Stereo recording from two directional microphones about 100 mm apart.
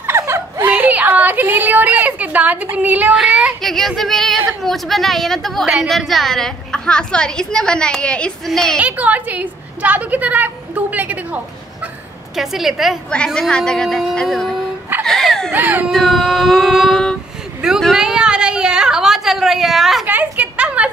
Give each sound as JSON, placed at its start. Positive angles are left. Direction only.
{"t": 0.0, "sound": "whimper", "side_deg": -25}
{"t": 3.2, "sound": "a woman's voice", "side_deg": -5}
{"t": 8.8, "sound": "a woman's voice", "side_deg": -15}
{"t": 12.4, "sound": "a woman's voice", "side_deg": -5}
{"t": 13.1, "sound": "a woman's voice", "side_deg": 10}
{"t": 15.0, "sound": "a sound", "side_deg": 5}
{"t": 15.5, "sound": "speech", "side_deg": -20}
{"t": 15.9, "sound": "a woman's voice", "side_deg": 0}
{"t": 17.6, "sound": "a sound", "side_deg": -5}
{"t": 20.1, "sound": "a sound", "side_deg": -15}